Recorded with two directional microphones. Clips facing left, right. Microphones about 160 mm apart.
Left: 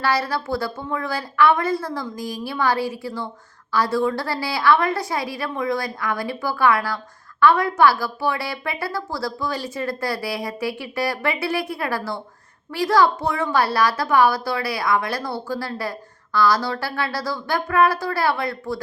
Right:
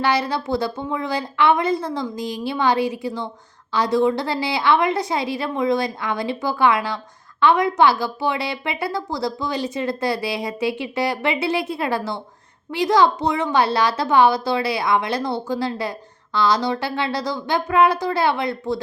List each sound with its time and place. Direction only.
0.0 s a woman's voice: 20° right (ahead or behind)